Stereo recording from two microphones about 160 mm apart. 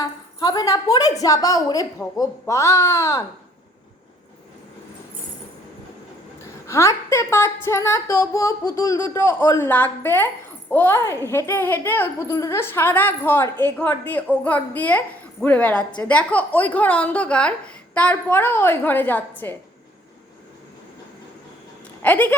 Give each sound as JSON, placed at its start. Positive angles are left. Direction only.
{"t": 0.0, "sound": "a woman's voice", "side_deg": 25}
{"t": 6.4, "sound": "speech", "side_deg": 15}
{"t": 22.0, "sound": "speech", "side_deg": 10}